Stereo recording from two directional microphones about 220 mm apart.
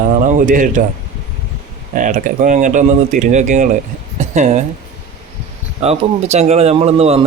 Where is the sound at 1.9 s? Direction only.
35° right (ahead or behind).